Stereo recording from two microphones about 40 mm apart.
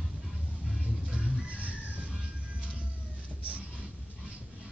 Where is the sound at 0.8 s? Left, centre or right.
Right.